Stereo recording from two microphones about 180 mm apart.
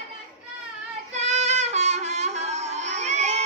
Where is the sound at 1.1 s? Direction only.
40° right (ahead or behind).